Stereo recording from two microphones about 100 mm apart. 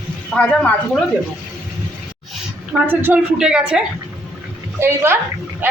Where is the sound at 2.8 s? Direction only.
20° right (ahead or behind).